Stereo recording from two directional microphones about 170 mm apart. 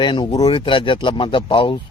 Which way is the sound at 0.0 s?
25° left (ahead or behind).